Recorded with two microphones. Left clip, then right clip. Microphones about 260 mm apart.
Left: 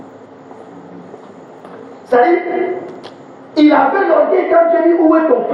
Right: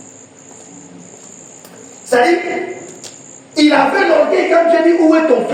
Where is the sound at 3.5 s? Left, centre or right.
Right.